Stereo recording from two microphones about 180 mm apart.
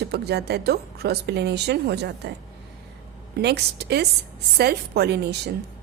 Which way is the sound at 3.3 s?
65° right (ahead or behind).